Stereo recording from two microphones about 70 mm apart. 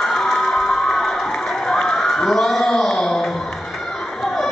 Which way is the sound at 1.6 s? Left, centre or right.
Centre.